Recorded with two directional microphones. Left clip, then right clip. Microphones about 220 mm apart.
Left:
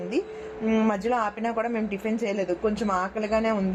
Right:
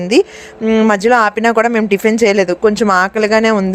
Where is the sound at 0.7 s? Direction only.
30° right (ahead or behind).